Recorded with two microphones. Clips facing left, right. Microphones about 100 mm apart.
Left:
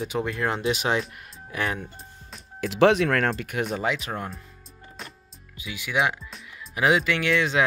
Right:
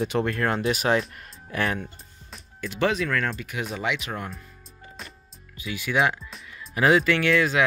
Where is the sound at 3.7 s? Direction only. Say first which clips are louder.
Right 1 dB; 35° left (ahead or behind).